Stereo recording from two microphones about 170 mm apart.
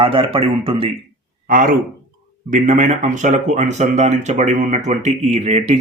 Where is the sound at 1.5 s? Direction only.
55° right (ahead or behind).